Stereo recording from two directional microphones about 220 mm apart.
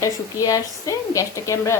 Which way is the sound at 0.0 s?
15° left (ahead or behind).